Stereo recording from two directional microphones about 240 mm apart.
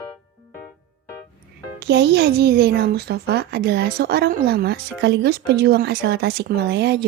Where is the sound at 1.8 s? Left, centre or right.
Right.